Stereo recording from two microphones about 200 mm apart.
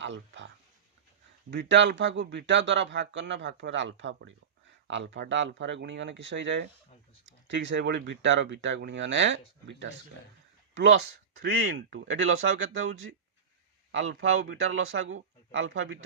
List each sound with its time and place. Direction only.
0.0 s a sound: 65° right (ahead or behind)
1.5 s speech: 65° right (ahead or behind)
11.3 s speech: 55° right (ahead or behind); by 16.0 s 75° right (ahead or behind)